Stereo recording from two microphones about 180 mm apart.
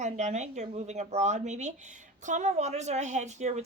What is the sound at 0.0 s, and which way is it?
A woman's voice, 40° right (ahead or behind).